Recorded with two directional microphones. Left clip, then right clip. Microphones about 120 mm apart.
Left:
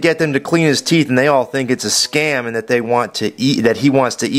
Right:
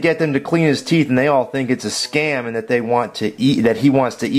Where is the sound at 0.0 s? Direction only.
40° left (ahead or behind).